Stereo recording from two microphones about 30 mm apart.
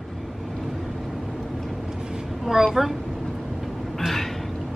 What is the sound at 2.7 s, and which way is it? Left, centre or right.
Speech, centre.